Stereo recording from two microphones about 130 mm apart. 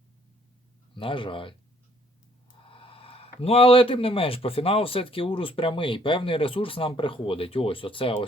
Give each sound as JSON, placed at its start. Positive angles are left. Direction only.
{"t": 0.9, "sound": "speech", "side_deg": 40}
{"t": 2.6, "sound": "speech", "side_deg": 45}